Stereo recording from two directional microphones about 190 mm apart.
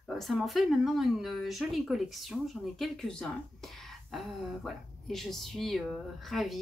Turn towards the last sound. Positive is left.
turn(degrees=0)  # may be behind; listen again after turning